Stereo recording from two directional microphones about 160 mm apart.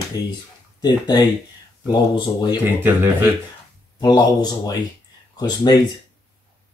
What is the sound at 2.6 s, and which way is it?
Speech, 15° right (ahead or behind).